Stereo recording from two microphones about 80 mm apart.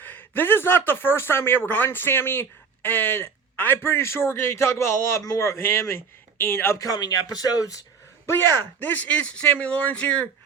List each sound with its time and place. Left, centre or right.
0.0 s speech: left
6.7 s speech: left
8.3 s speech: left; by 10.2 s centre